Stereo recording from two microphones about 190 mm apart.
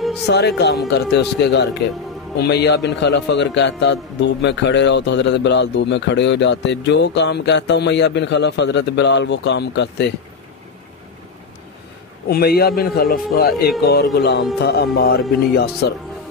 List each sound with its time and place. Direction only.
0.3 s a man's voice: 60° left (ahead or behind)
12.3 s a man's voice: 55° left (ahead or behind)